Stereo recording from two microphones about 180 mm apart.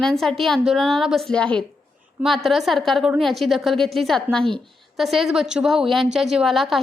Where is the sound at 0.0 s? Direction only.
Centre (ahead or behind).